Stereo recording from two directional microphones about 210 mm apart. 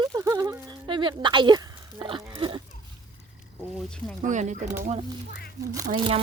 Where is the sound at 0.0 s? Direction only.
15° right (ahead or behind).